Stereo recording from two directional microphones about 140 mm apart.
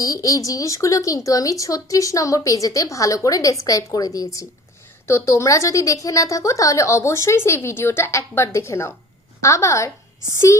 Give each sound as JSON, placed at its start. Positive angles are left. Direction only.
{"t": 0.0, "sound": "speech", "side_deg": 25}